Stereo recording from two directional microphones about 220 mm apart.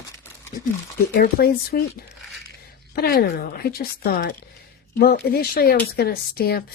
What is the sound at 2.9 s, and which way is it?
Speech, 45° left (ahead or behind).